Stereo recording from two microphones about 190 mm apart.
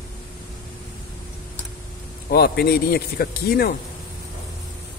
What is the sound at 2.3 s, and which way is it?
Speech, 55° left (ahead or behind).